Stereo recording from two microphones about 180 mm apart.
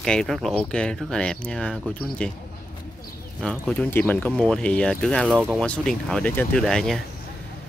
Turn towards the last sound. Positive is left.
turn(degrees=0)  # may be behind; listen again after turning